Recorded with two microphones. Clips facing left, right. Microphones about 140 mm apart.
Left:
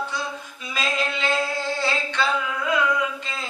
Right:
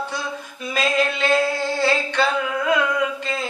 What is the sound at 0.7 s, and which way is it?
Female singing, 55° right (ahead or behind).